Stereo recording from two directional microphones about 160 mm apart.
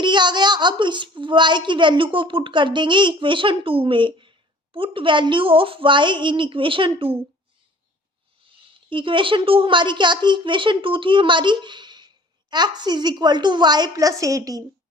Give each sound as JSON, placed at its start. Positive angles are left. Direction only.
{"t": 0.0, "sound": "a woman's voice", "side_deg": -30}
{"t": 8.9, "sound": "a woman's voice", "side_deg": -30}